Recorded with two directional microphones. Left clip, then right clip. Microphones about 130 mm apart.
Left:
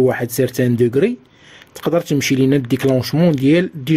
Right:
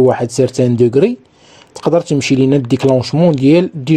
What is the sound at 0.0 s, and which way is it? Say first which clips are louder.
Speech: right 5 dB; 10° right (ahead or behind).